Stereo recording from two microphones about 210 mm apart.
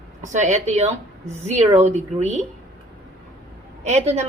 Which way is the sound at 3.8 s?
30° right (ahead or behind).